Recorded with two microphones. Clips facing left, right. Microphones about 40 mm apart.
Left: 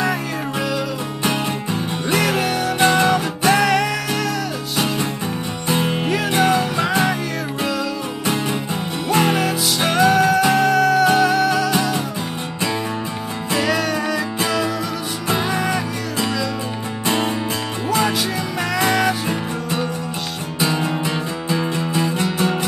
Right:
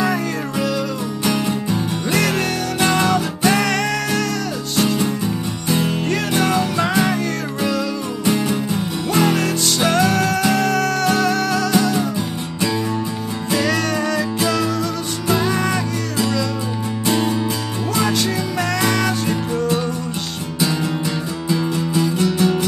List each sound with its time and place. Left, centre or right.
0.0 s music: centre
1.2 s music: left
2.0 s music: centre
6.4 s music: centre
8.3 s music: left
9.4 s music: centre
13.6 s music: centre
17.0 s music: left
17.8 s music: centre
21.5 s music: left